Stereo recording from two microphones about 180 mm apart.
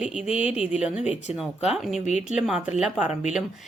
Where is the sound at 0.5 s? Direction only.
5° right (ahead or behind).